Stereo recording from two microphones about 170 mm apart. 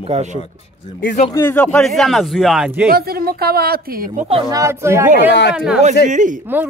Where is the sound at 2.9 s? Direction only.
65° right (ahead or behind).